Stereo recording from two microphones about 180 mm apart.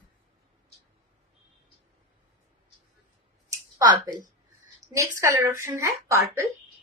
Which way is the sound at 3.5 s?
20° right (ahead or behind).